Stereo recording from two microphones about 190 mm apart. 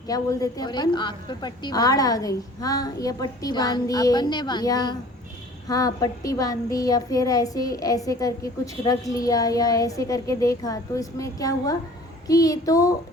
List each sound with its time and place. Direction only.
0.1 s a woman's voice: 20° left (ahead or behind)